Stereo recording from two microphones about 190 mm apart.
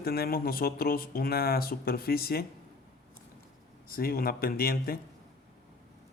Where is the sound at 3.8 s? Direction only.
50° left (ahead or behind).